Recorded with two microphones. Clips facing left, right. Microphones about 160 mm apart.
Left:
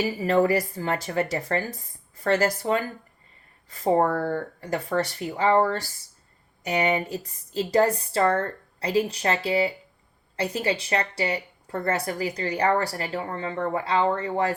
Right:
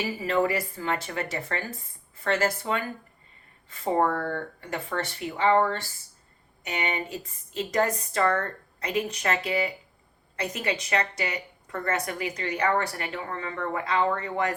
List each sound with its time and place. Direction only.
0.2 s speech: 40° left (ahead or behind)